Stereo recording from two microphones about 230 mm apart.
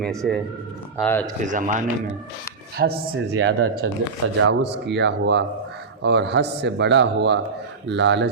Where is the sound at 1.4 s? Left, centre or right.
Right.